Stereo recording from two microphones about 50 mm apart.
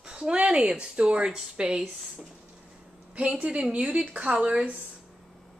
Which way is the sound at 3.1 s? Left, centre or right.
Right.